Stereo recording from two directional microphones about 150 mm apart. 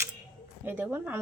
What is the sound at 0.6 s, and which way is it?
Speech, 10° right (ahead or behind).